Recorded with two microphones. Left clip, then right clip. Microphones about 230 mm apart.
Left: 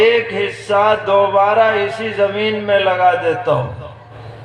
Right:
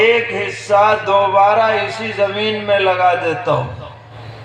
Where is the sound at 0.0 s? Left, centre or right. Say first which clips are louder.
Even; left.